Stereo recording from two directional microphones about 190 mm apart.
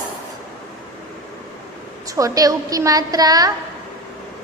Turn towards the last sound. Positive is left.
turn(degrees=-20)  # may be behind; listen again after turning